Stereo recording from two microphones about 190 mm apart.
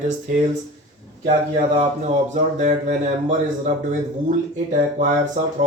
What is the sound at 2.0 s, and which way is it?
Speech, 40° right (ahead or behind).